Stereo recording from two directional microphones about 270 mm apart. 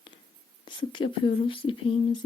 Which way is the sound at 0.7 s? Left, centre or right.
Centre.